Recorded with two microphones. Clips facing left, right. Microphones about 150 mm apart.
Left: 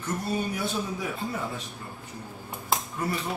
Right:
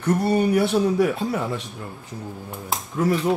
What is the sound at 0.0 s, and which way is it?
Speech, 70° right (ahead or behind).